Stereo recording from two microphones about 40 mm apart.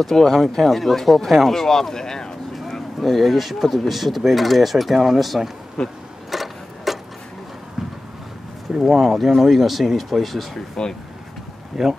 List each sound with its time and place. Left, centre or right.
0.0 s speech: centre
3.0 s speech: centre
5.8 s speech: centre
6.3 s clock: centre
8.7 s speech: centre
10.8 s speech: centre
11.7 s speech: centre